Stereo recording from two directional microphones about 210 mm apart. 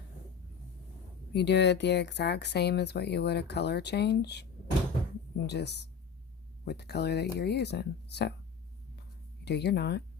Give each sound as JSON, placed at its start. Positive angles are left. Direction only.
{"t": 1.3, "sound": "speech", "side_deg": 55}
{"t": 5.5, "sound": "speech", "side_deg": 55}
{"t": 9.4, "sound": "speech", "side_deg": 55}